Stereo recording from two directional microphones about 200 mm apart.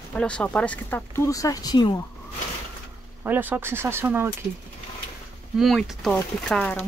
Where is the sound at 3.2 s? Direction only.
10° right (ahead or behind).